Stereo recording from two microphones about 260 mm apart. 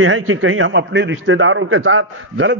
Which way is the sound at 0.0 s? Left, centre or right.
Right.